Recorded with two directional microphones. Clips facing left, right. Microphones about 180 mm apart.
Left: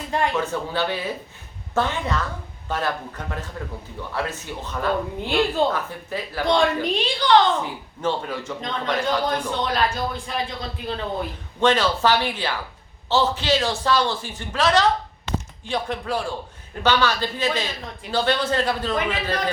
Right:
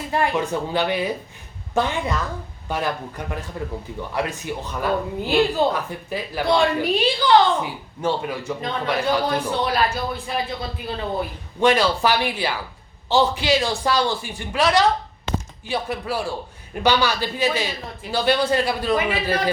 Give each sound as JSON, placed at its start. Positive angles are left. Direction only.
{"t": 0.1, "sound": "speech", "side_deg": -10}